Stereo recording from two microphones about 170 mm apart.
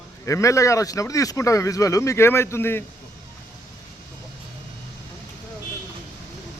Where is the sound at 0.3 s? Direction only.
20° left (ahead or behind).